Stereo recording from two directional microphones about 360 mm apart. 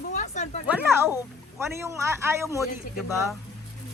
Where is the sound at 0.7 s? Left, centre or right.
Centre.